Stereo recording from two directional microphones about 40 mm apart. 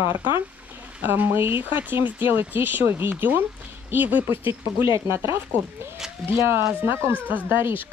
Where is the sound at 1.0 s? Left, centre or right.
Right.